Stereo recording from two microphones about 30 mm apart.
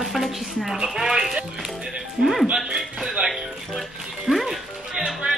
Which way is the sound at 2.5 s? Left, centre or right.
Centre.